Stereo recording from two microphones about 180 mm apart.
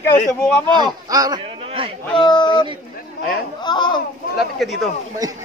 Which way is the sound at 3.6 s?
25° left (ahead or behind).